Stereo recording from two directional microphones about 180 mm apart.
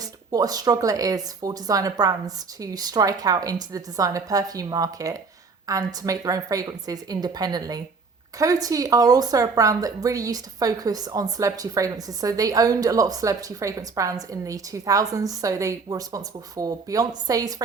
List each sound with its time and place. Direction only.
0.3 s a woman's voice: 20° right (ahead or behind)